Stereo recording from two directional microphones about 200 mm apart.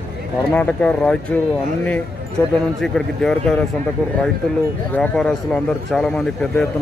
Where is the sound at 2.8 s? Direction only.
Centre (ahead or behind).